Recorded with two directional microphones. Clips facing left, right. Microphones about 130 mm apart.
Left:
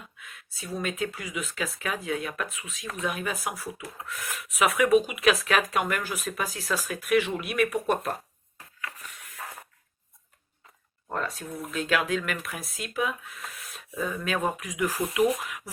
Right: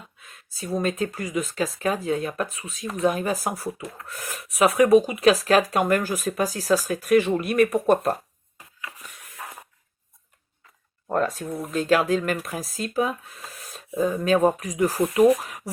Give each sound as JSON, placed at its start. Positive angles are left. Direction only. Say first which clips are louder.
{"t": 0.2, "sound": "speech", "louder": "right 8 dB", "side_deg": -35}
{"t": 8.5, "sound": "a sound", "louder": "even", "side_deg": -15}
{"t": 9.4, "sound": "spray", "louder": "right 2 dB", "side_deg": -15}
{"t": 11.1, "sound": "speech", "louder": "right 8 dB", "side_deg": -45}